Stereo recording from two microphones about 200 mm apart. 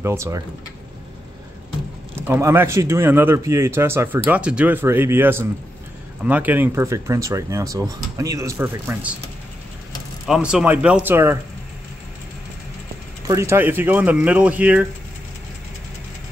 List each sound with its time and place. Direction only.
0.0 s speech: 15° right (ahead or behind)
2.1 s speech: 10° right (ahead or behind)
10.2 s speech: 5° right (ahead or behind)
13.3 s speech: 15° right (ahead or behind)